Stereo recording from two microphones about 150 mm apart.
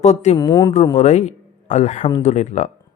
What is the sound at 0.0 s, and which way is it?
Speech, 50° left (ahead or behind).